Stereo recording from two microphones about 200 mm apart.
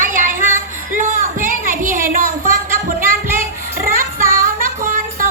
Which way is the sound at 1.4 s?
45° right (ahead or behind).